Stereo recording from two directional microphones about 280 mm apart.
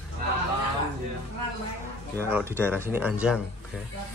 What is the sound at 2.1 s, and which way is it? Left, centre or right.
Speech, centre.